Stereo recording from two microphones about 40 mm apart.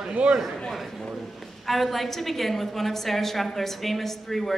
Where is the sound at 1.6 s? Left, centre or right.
Centre.